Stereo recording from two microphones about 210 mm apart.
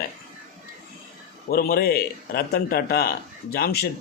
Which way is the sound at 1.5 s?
45° left (ahead or behind).